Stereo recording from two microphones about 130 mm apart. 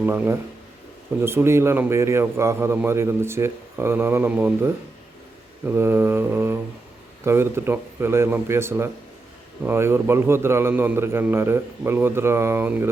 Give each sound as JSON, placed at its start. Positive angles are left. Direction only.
{"t": 0.0, "sound": "mantra", "side_deg": -15}
{"t": 1.2, "sound": "a man's voice", "side_deg": -20}
{"t": 5.6, "sound": "mantra", "side_deg": -15}
{"t": 7.3, "sound": "a man's voice", "side_deg": -20}